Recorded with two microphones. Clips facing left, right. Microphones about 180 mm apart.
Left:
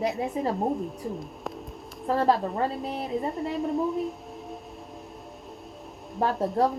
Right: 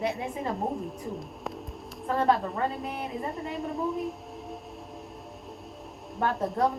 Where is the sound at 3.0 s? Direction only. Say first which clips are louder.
Left 5 dB; centre (ahead or behind).